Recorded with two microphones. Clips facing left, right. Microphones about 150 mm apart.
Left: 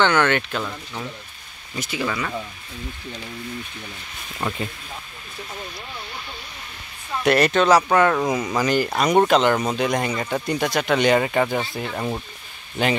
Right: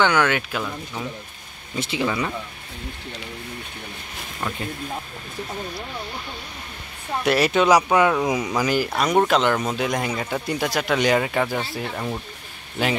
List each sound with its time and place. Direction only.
0.0 s speech: 10° right (ahead or behind)
1.8 s speech: 25° right (ahead or behind)
4.4 s speech: 5° left (ahead or behind)
7.2 s speech: 5° right (ahead or behind)